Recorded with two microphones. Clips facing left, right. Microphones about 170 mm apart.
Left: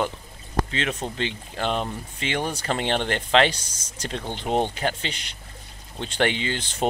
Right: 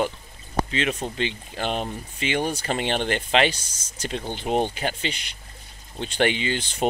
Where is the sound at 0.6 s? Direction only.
15° right (ahead or behind).